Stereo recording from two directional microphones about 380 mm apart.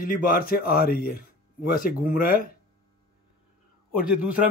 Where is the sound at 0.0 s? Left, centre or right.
Left.